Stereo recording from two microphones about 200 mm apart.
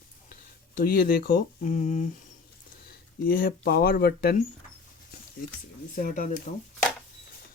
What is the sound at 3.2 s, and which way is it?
Speech, 45° left (ahead or behind).